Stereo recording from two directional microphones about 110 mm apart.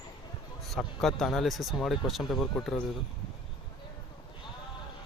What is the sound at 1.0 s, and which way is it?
Speech, 5° left (ahead or behind).